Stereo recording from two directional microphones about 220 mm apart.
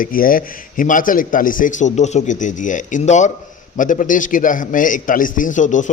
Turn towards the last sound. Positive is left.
turn(degrees=35)  # may be behind; listen again after turning